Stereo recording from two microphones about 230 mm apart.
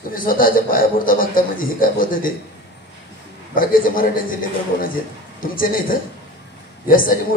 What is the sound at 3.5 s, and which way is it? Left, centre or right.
A man's voice, left.